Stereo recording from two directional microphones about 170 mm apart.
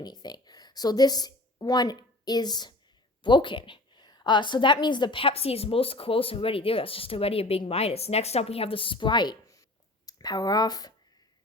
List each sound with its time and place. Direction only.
0.0 s a woman's voice: 25° left (ahead or behind)